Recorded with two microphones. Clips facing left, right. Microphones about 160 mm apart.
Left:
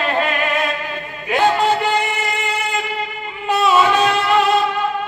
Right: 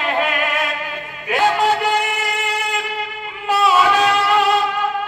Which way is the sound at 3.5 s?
Centre (ahead or behind).